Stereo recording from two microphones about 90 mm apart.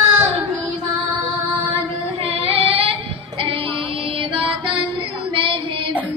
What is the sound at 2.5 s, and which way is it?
Female singing, 90° right.